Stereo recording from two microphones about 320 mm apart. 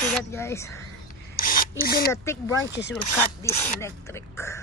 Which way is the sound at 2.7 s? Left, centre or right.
Left.